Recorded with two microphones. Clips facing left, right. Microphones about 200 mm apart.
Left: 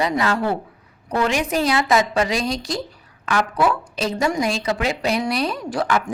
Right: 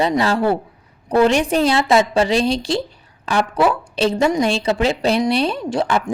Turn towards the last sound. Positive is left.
turn(degrees=-25)  # may be behind; listen again after turning